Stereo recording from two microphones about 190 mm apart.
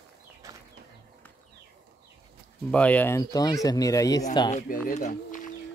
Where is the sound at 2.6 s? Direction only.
5° left (ahead or behind).